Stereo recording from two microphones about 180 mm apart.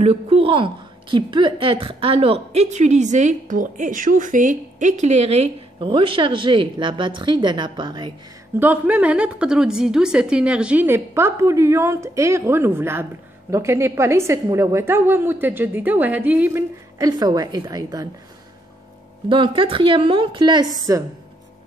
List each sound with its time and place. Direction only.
0.0 s a woman's voice: 35° right (ahead or behind)
8.5 s a woman's voice: 10° right (ahead or behind)
19.2 s a woman's voice: 30° right (ahead or behind)